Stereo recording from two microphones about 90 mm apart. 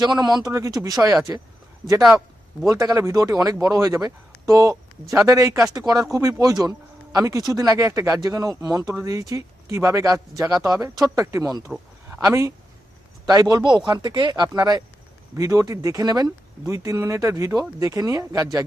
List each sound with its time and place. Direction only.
0.0 s speech: 50° right (ahead or behind)
0.5 s speech: 35° right (ahead or behind)
2.6 s speech: 35° right (ahead or behind)
5.7 s speech: 45° right (ahead or behind)
13.2 s speech: 45° right (ahead or behind)